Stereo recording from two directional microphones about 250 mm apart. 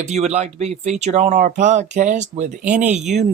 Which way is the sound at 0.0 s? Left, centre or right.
Right.